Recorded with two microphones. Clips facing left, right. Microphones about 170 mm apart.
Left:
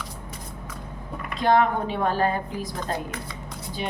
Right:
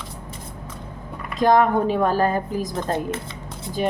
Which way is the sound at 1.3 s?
45° right (ahead or behind).